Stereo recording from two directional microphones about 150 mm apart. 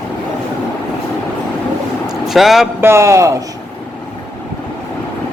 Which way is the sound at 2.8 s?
15° right (ahead or behind).